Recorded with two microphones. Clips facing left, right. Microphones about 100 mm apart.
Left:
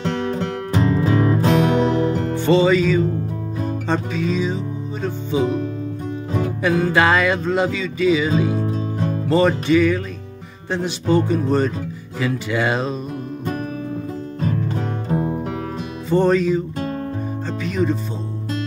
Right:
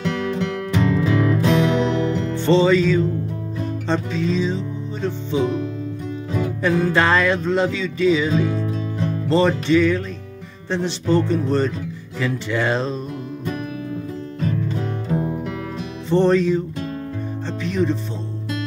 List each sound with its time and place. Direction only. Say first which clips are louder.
0.0 s music: even; 35° left (ahead or behind)
2.3 s music: even; 5° left (ahead or behind)
6.6 s music: left 1 dB; 5° left (ahead or behind)
8.5 s music: left 2 dB; 35° left (ahead or behind)
9.3 s music: left 1 dB; 5° left (ahead or behind)
14.4 s music: left 1 dB; 40° left (ahead or behind)
16.1 s music: even; 5° left (ahead or behind)
17.6 s music: even; 5° left (ahead or behind)